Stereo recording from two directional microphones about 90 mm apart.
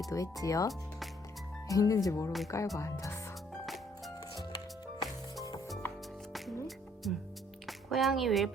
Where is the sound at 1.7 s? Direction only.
40° left (ahead or behind).